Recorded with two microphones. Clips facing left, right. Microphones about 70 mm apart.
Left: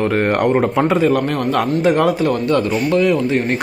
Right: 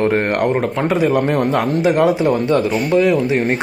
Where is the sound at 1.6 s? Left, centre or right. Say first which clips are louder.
Left 2 dB; centre.